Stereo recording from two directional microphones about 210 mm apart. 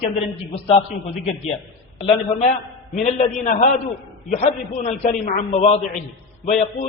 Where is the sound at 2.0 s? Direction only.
30° left (ahead or behind).